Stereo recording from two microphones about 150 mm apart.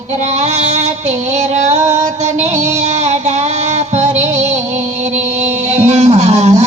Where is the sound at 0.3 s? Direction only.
50° right (ahead or behind).